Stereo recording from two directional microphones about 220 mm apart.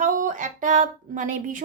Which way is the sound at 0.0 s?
35° right (ahead or behind).